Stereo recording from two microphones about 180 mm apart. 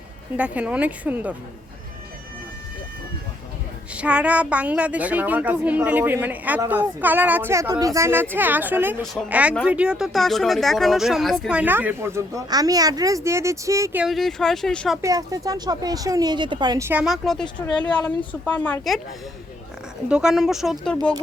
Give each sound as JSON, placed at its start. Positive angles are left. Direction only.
{"t": 0.3, "sound": "speech", "side_deg": -5}
{"t": 3.9, "sound": "speech", "side_deg": -5}
{"t": 14.0, "sound": "speech", "side_deg": 0}
{"t": 15.0, "sound": "speech", "side_deg": -20}
{"t": 17.4, "sound": "speech", "side_deg": 25}
{"t": 17.8, "sound": "speech", "side_deg": 5}
{"t": 20.1, "sound": "speech", "side_deg": -5}